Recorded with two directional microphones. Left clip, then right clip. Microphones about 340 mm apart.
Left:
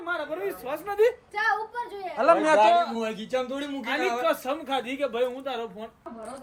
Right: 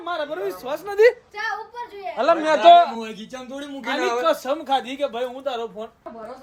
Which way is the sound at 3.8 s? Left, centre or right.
Right.